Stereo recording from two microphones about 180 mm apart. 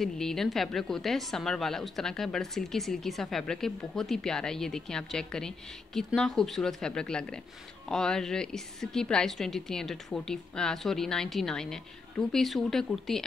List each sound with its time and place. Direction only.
0.0 s a woman's voice: centre (ahead or behind)